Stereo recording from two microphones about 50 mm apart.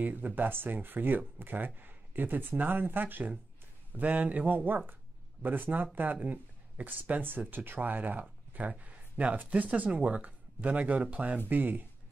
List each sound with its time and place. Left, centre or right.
0.0 s speech: right